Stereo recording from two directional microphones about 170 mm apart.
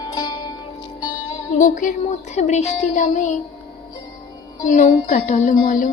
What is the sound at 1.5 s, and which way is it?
Child singing, 50° left (ahead or behind).